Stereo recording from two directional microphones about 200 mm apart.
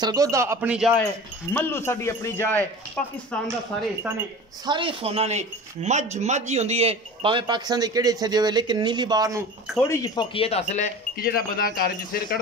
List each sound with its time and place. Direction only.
0.0 s speech: 20° right (ahead or behind); by 1.0 s 5° right (ahead or behind)
1.5 s speech: 10° left (ahead or behind)
4.6 s speech: 25° right (ahead or behind)
9.8 s speech: 15° left (ahead or behind); by 12.4 s 45° left (ahead or behind)